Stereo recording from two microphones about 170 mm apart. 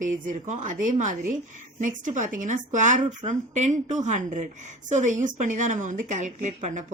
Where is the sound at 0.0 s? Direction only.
50° right (ahead or behind).